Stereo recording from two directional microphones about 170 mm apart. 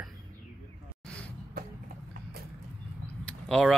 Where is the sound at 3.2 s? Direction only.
5° left (ahead or behind).